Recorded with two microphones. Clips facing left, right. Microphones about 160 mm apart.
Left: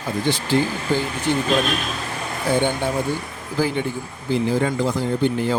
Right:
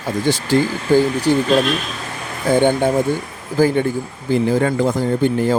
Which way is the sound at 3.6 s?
45° right (ahead or behind).